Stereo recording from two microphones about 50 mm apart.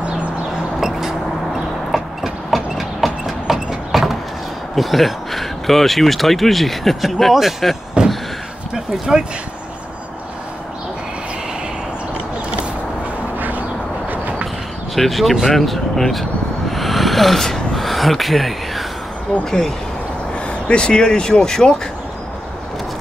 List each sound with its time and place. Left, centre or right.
0.7 s vehicle: centre
1.9 s train: centre
4.7 s speech: centre
8.0 s a sound: centre
13.4 s a sound: right
15.0 s speech: centre
16.7 s gasp: centre
20.3 s speech: left